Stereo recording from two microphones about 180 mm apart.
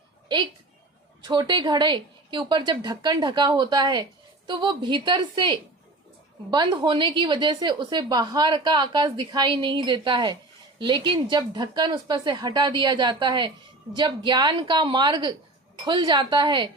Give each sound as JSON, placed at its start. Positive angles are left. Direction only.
{"t": 1.2, "sound": "a woman's voice", "side_deg": -25}